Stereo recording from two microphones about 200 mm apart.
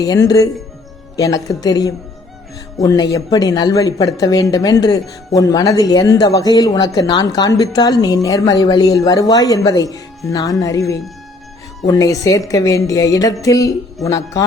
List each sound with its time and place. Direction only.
0.0 s speech: 20° left (ahead or behind)